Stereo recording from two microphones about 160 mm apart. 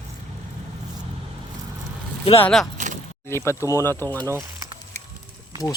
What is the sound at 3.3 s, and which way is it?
Speech, 15° left (ahead or behind).